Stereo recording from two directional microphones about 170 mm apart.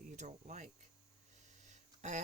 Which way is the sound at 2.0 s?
45° right (ahead or behind).